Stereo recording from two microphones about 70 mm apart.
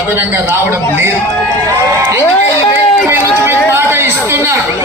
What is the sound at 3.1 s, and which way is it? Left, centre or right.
Chatter, right.